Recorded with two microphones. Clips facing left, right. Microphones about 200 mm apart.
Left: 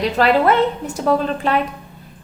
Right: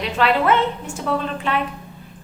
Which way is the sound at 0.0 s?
40° left (ahead or behind).